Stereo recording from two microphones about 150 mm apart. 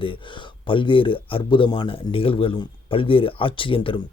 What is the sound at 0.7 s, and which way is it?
Speech, 35° left (ahead or behind).